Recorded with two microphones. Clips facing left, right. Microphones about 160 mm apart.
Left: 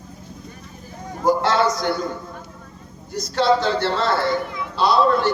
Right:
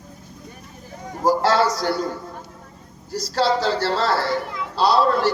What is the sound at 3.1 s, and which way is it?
Speech, 35° right (ahead or behind).